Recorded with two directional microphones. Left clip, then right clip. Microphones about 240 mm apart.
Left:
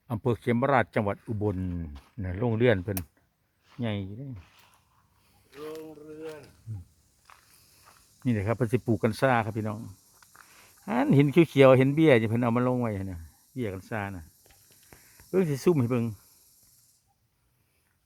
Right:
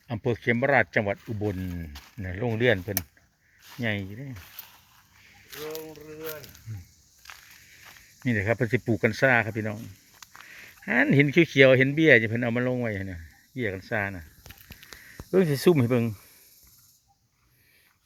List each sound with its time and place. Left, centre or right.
0.1 s speech: centre
1.9 s speech: right
2.2 s speech: centre
4.4 s a sound: right
5.5 s speech: right
7.2 s a sound: right
8.2 s speech: centre
14.8 s speech: centre